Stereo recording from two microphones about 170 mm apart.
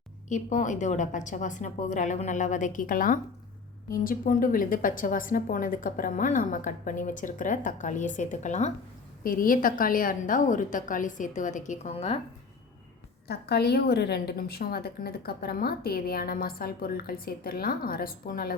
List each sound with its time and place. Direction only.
0.3 s a woman's voice: 45° left (ahead or behind)
9.2 s a woman's voice: 55° left (ahead or behind); by 12.2 s 35° left (ahead or behind)
13.2 s a woman's voice: 70° left (ahead or behind)